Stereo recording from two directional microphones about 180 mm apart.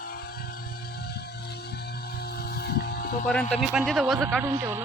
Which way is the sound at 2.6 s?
60° left (ahead or behind).